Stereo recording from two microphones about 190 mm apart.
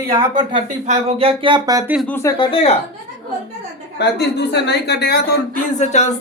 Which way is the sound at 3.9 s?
60° left (ahead or behind).